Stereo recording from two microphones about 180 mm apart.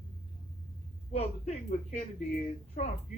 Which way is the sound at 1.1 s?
40° left (ahead or behind).